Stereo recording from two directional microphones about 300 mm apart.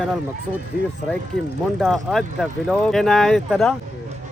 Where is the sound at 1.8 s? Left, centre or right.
Centre.